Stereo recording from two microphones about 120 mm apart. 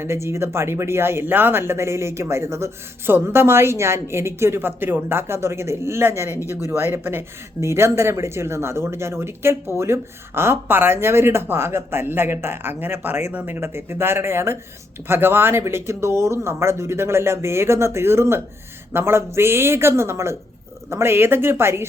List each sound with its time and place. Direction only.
0.0 s speech: 20° right (ahead or behind)
6.3 s speech: 25° left (ahead or behind)
6.6 s speech: 20° right (ahead or behind)